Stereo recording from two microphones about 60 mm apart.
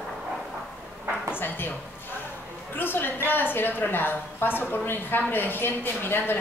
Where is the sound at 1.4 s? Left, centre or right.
Left.